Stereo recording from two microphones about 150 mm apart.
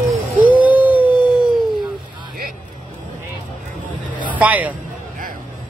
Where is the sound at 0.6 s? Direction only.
10° right (ahead or behind).